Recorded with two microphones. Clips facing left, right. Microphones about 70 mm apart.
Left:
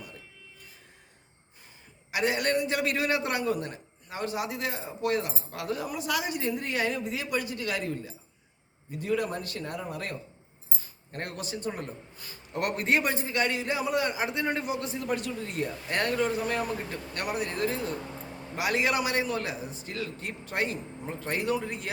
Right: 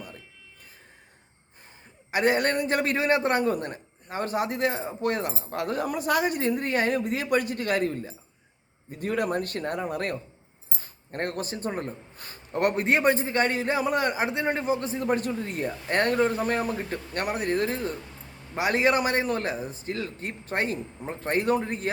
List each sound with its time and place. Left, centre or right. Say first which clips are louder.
2.0 s a man's voice: right 4 dB; right